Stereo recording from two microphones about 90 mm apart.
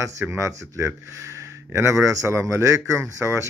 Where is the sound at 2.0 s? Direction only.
35° right (ahead or behind).